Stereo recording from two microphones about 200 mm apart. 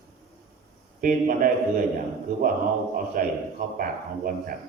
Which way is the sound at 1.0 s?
45° right (ahead or behind).